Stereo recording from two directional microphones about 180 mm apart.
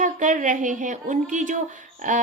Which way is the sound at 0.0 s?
45° right (ahead or behind).